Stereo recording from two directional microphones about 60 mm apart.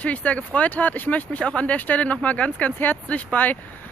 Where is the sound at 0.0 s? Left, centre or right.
Left.